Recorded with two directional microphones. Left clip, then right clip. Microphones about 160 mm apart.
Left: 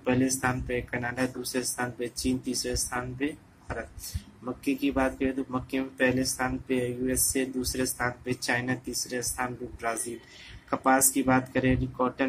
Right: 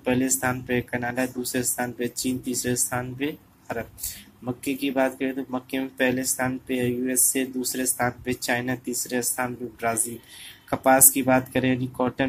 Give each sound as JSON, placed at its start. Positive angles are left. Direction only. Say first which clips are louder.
{"t": 0.0, "sound": "speech", "louder": "right 3 dB", "side_deg": -25}